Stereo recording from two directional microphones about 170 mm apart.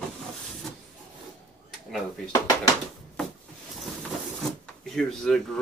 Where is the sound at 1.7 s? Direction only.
Centre (ahead or behind).